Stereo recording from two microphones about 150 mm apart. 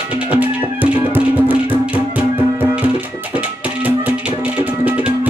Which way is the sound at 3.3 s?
10° right (ahead or behind).